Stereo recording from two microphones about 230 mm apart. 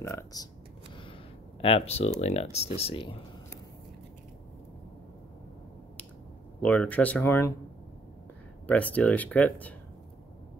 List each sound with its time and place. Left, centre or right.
0.0 s speech: centre
1.6 s speech: left
6.6 s speech: centre
8.6 s speech: centre